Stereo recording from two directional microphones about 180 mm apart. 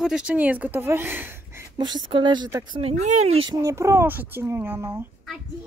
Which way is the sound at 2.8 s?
35° right (ahead or behind).